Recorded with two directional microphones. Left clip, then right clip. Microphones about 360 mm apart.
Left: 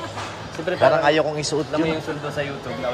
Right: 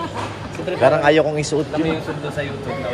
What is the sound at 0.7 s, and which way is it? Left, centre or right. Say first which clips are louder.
Speech: right 3 dB; centre.